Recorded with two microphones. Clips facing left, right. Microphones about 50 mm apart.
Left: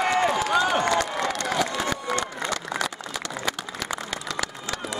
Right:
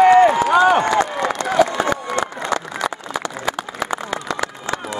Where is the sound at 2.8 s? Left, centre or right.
Centre.